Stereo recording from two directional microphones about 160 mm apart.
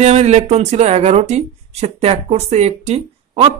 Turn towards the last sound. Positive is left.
turn(degrees=-40)  # may be behind; listen again after turning